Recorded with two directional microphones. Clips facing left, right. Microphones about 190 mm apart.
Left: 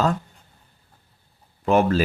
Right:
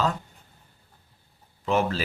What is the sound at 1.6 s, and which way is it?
Speech, 55° left (ahead or behind).